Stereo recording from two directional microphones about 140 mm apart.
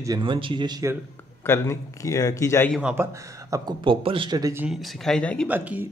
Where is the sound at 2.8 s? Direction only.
10° right (ahead or behind).